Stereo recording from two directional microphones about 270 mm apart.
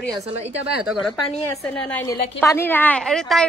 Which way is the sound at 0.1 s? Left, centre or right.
Right.